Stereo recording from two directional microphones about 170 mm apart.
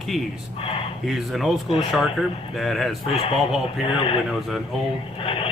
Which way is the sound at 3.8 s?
30° left (ahead or behind).